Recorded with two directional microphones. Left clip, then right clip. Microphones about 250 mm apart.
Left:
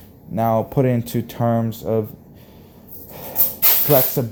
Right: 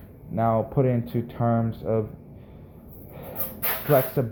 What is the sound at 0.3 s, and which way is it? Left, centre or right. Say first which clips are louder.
Speech: left 4 dB; left.